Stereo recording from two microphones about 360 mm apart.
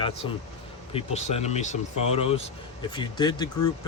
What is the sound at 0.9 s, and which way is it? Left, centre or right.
Speech, centre.